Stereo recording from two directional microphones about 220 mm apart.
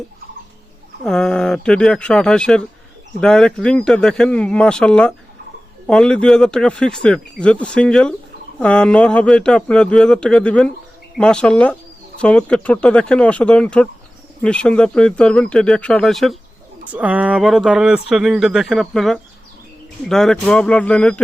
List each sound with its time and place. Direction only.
1.0 s speech: 5° left (ahead or behind)